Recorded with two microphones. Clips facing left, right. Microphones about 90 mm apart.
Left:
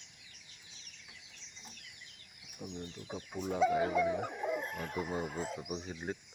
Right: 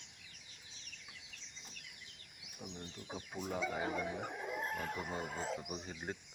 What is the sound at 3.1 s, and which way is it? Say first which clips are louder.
Speech: left 4 dB; centre (ahead or behind).